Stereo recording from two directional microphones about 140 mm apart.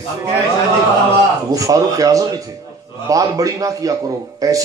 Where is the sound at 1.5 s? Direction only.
25° right (ahead or behind).